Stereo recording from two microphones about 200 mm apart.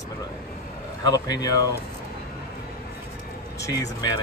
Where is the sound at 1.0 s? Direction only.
20° left (ahead or behind).